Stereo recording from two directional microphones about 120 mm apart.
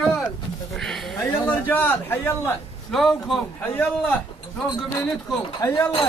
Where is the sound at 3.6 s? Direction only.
15° left (ahead or behind).